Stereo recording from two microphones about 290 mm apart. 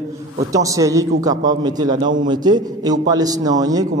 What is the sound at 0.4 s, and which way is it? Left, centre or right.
A man's voice, centre.